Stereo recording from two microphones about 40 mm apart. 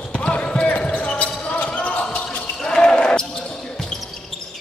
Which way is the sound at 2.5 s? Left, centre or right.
Left.